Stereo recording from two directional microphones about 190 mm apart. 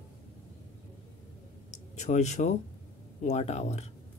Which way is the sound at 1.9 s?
35° left (ahead or behind).